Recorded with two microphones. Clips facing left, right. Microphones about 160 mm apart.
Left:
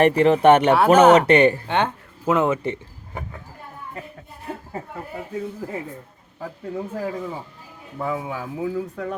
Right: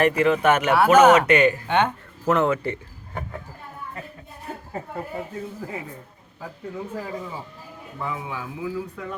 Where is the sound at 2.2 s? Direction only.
15° left (ahead or behind).